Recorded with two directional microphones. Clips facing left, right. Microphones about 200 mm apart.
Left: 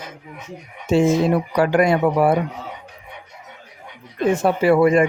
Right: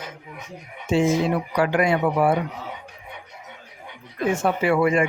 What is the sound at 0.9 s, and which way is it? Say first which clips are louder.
Speech: left 4 dB; 40° left (ahead or behind).